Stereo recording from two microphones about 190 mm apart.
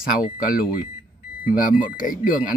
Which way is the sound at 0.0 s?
50° left (ahead or behind).